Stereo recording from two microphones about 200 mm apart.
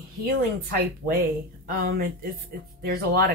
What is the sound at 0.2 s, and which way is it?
Speech, 50° right (ahead or behind).